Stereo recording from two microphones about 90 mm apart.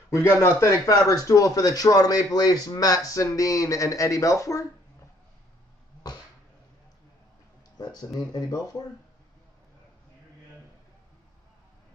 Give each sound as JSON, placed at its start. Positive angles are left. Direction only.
{"t": 0.4, "sound": "a man's voice", "side_deg": 35}
{"t": 7.7, "sound": "speech", "side_deg": 50}